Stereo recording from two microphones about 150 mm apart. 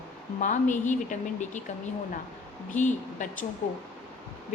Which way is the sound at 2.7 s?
55° left (ahead or behind).